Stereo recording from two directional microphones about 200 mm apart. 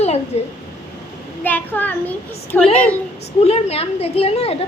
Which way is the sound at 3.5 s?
30° left (ahead or behind).